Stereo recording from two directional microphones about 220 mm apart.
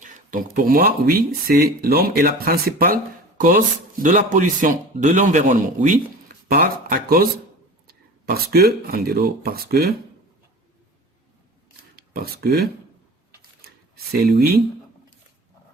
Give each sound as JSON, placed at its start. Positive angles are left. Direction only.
{"t": 0.0, "sound": "speech", "side_deg": -35}
{"t": 11.9, "sound": "speech", "side_deg": -45}
{"t": 13.6, "sound": "a sound", "side_deg": -45}